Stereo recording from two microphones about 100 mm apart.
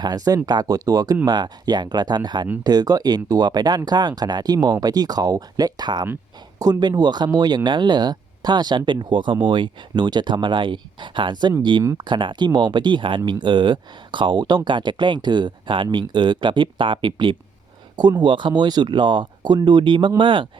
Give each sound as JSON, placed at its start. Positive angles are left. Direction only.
{"t": 0.0, "sound": "speech", "side_deg": -40}